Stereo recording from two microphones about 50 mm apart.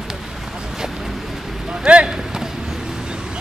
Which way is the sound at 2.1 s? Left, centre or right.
Centre.